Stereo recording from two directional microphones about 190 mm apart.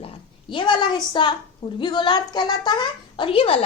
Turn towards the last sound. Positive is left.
turn(degrees=30)  # may be behind; listen again after turning